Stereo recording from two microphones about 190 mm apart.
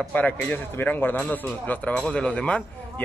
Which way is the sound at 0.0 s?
10° left (ahead or behind).